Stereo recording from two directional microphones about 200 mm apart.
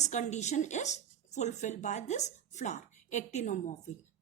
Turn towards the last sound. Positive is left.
turn(degrees=35)  # may be behind; listen again after turning